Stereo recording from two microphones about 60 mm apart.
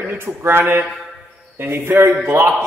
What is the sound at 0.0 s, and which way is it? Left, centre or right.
Mantra, right.